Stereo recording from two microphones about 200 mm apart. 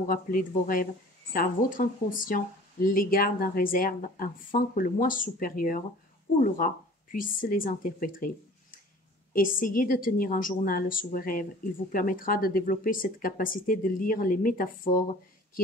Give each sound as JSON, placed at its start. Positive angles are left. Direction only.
{"t": 0.0, "sound": "speech", "side_deg": 45}
{"t": 9.3, "sound": "speech", "side_deg": 45}